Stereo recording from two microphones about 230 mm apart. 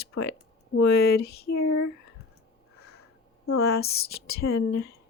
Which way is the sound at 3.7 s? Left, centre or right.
Left.